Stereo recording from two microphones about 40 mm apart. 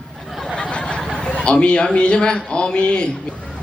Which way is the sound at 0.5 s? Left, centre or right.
Left.